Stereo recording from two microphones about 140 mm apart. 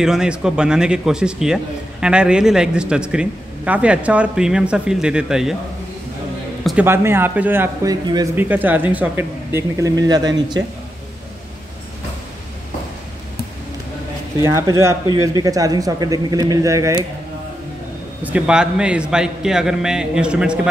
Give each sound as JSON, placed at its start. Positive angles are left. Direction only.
{"t": 0.0, "sound": "speech", "side_deg": -5}
{"t": 6.8, "sound": "speech", "side_deg": -15}
{"t": 8.4, "sound": "speech", "side_deg": -15}
{"t": 14.4, "sound": "speech", "side_deg": -20}
{"t": 18.2, "sound": "speech", "side_deg": -5}